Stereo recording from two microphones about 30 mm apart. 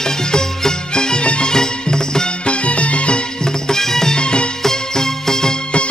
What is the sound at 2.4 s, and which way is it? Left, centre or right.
Music, left.